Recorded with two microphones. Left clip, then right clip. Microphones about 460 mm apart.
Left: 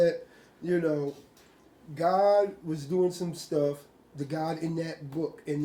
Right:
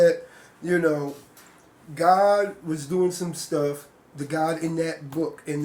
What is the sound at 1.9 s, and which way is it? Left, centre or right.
Speech, left.